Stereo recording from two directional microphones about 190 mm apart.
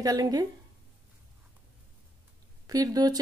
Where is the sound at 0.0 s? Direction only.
20° right (ahead or behind).